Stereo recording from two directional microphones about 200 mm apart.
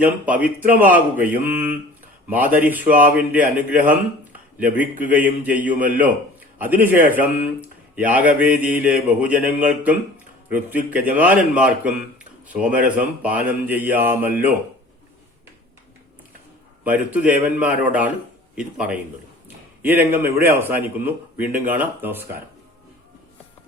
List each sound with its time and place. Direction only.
0.0 s a man's voice: 5° right (ahead or behind)
16.8 s a man's voice: 5° right (ahead or behind)
20.6 s a man's voice: 10° right (ahead or behind)